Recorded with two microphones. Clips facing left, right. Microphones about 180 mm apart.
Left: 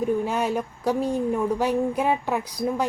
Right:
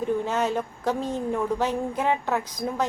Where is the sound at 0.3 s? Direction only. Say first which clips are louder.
Even; 10° left (ahead or behind).